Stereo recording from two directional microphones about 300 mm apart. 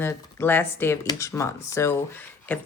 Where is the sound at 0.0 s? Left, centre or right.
Centre.